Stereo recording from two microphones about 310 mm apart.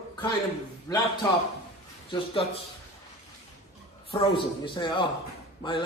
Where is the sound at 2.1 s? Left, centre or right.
Centre.